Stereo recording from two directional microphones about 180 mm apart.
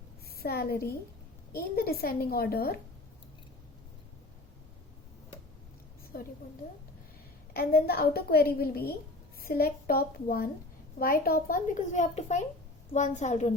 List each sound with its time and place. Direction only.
0.3 s a woman's voice: 60° left (ahead or behind)
6.1 s a woman's voice: 55° left (ahead or behind)
7.5 s a woman's voice: 60° left (ahead or behind); by 13.5 s 40° left (ahead or behind)